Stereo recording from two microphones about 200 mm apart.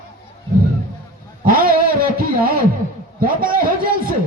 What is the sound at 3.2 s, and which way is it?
Speech, 45° right (ahead or behind).